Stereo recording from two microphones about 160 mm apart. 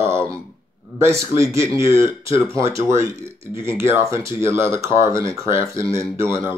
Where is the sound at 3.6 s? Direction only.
15° right (ahead or behind).